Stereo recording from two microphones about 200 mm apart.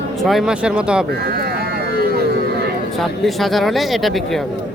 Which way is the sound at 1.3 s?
50° right (ahead or behind).